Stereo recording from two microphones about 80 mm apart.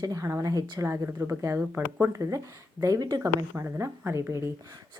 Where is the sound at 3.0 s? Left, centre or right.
Right.